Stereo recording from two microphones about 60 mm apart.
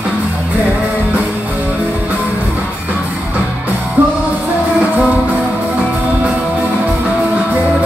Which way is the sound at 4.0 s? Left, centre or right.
Right.